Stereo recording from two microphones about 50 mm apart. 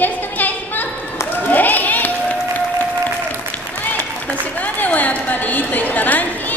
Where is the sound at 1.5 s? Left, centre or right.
Left.